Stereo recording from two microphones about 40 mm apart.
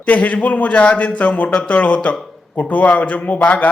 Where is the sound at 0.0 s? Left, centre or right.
Left.